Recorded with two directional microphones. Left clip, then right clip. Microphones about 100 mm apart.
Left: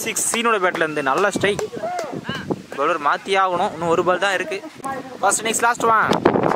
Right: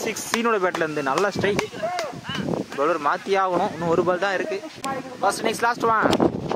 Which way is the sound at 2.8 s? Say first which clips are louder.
Left 3 dB; 20° left (ahead or behind).